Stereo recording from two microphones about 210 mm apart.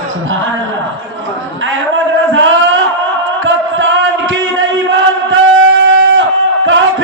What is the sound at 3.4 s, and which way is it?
Chant, 65° right (ahead or behind).